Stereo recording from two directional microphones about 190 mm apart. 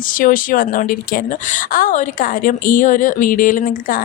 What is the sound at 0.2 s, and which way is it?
A woman's voice, 45° left (ahead or behind).